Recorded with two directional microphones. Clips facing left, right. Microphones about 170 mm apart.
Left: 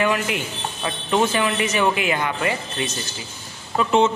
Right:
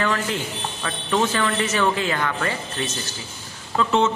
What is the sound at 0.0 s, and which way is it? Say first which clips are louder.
A man's voice: left 2 dB; 15° left (ahead or behind).